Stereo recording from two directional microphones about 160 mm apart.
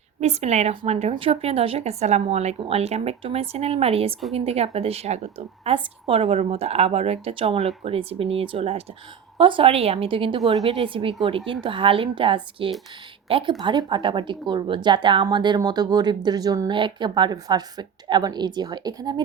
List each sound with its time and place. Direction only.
0.2 s a woman's voice: 40° right (ahead or behind); by 19.2 s 25° right (ahead or behind)